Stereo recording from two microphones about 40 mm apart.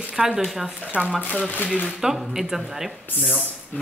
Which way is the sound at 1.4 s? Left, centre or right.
Left.